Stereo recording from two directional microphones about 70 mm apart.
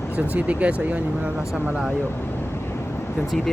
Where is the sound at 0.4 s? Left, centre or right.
Centre.